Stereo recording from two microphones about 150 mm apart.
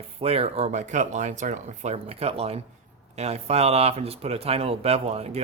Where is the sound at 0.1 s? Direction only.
40° right (ahead or behind).